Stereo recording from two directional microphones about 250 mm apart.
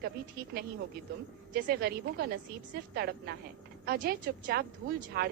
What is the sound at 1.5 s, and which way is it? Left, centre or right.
A woman's voice, right.